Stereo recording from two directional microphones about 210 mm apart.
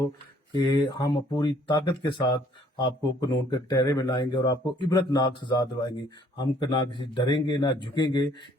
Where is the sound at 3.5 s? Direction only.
20° left (ahead or behind).